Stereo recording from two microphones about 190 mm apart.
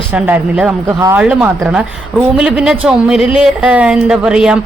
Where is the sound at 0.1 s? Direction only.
5° right (ahead or behind).